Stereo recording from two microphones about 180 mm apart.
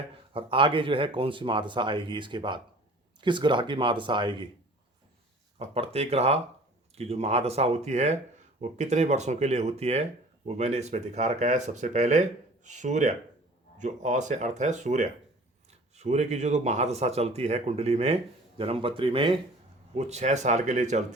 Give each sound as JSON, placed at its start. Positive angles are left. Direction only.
{"t": 0.3, "sound": "speech", "side_deg": -30}
{"t": 5.5, "sound": "speech", "side_deg": -35}